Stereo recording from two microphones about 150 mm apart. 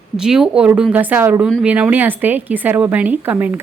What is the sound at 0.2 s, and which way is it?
A woman's voice, 5° right (ahead or behind).